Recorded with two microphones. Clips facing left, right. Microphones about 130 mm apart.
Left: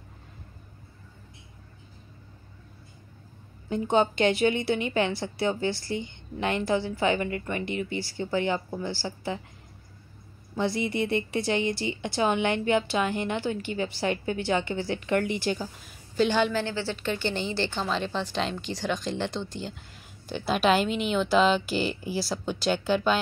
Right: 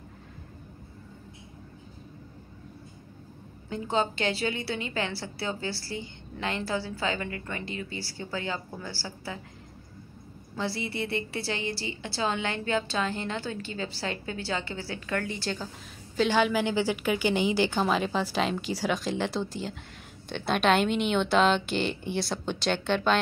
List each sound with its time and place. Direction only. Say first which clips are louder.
3.6 s a woman's voice: left 5 dB; 20° left (ahead or behind)
10.5 s a woman's voice: left 5 dB; 20° left (ahead or behind)
16.2 s a woman's voice: even; centre (ahead or behind)
16.6 s a woman's voice: right 3 dB; 15° right (ahead or behind); by 23.1 s 5° left (ahead or behind)